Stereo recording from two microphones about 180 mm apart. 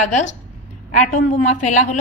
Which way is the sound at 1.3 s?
45° left (ahead or behind).